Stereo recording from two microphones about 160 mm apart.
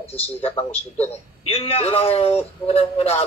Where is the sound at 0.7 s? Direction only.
40° left (ahead or behind).